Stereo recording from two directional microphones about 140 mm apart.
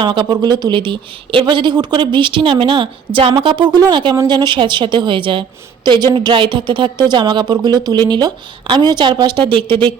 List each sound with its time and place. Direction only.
0.0 s speech: 35° right (ahead or behind)